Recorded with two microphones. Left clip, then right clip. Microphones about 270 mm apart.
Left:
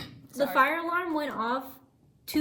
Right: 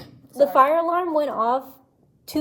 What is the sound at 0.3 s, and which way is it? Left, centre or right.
A woman's voice, centre.